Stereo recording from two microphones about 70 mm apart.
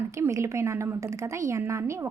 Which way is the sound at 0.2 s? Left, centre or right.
Right.